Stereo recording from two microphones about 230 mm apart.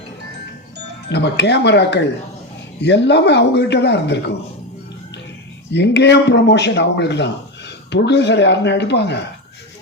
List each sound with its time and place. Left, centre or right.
1.1 s a man's voice: left
5.7 s a man's voice: left